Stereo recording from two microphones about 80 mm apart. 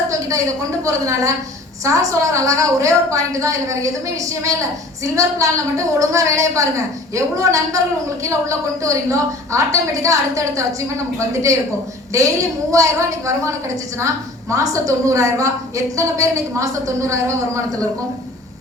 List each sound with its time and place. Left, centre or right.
0.1 s a sound: right
0.9 s a woman's voice: right
12.1 s a woman's voice: right
14.5 s a woman's voice: right